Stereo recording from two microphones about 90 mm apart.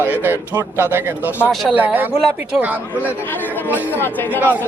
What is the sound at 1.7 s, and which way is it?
Speech, 20° right (ahead or behind).